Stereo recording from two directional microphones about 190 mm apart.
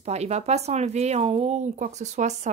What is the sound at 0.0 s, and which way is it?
A woman's voice, 35° right (ahead or behind).